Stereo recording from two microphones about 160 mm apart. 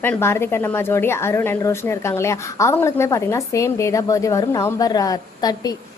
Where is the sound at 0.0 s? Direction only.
15° left (ahead or behind).